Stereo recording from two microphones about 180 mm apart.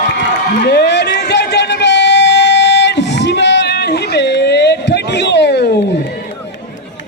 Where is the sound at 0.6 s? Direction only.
65° left (ahead or behind).